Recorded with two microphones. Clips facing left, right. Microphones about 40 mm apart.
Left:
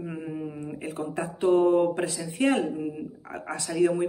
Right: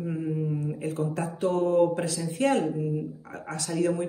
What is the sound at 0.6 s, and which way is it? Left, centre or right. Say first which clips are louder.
Speech: right 3 dB; left.